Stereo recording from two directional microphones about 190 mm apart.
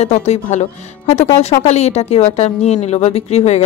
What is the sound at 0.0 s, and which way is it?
Speech, 35° left (ahead or behind).